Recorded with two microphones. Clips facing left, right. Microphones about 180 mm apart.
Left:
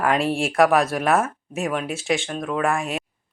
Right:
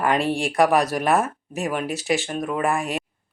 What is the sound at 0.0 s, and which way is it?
Speech, centre (ahead or behind).